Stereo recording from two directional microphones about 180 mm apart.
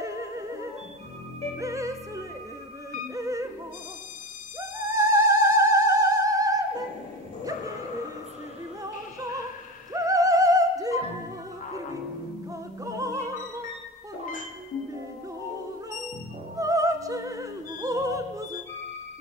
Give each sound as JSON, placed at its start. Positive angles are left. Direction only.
{"t": 1.6, "sound": "music", "side_deg": -15}
{"t": 4.6, "sound": "opera", "side_deg": -15}
{"t": 9.9, "sound": "music", "side_deg": -20}
{"t": 12.4, "sound": "music", "side_deg": -20}
{"t": 16.5, "sound": "opera", "side_deg": -20}